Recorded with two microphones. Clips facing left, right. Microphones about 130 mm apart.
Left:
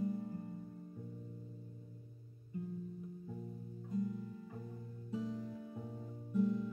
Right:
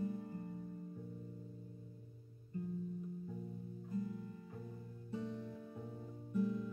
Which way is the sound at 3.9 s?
Centre (ahead or behind).